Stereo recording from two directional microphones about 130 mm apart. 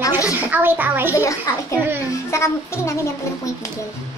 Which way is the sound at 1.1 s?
25° left (ahead or behind).